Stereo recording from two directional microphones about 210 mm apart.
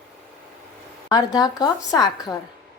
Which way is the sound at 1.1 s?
20° left (ahead or behind).